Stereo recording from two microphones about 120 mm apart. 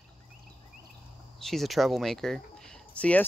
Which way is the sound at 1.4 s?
Centre (ahead or behind).